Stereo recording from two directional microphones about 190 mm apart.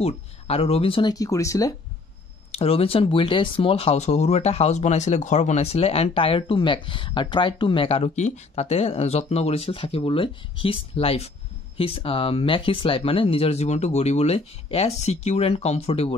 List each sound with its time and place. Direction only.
0.0 s speech: 30° left (ahead or behind); by 1.8 s 15° left (ahead or behind)
2.5 s speech: 30° left (ahead or behind)